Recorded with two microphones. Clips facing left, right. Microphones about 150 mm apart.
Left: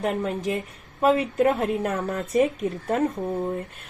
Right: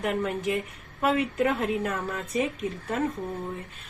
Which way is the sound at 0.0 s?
35° left (ahead or behind).